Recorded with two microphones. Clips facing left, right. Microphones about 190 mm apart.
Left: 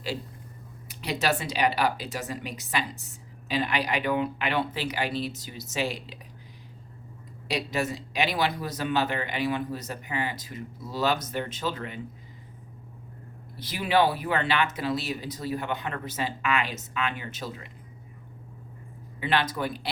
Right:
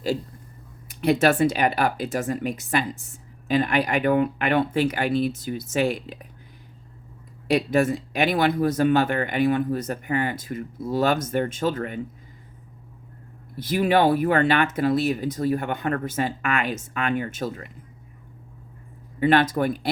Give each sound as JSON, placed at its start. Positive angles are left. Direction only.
{"t": 0.9, "sound": "speech", "side_deg": -55}
{"t": 7.4, "sound": "speech", "side_deg": -55}
{"t": 13.6, "sound": "speech", "side_deg": -50}
{"t": 19.2, "sound": "speech", "side_deg": -50}